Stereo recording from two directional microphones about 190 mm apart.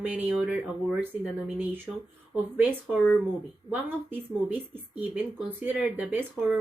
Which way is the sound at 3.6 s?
30° left (ahead or behind).